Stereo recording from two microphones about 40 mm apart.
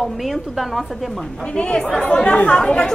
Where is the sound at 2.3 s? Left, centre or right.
Left.